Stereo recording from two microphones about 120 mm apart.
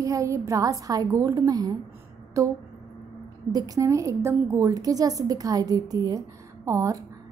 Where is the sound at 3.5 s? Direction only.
30° right (ahead or behind).